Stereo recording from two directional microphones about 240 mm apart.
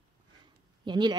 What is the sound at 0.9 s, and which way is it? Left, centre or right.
Speech, centre.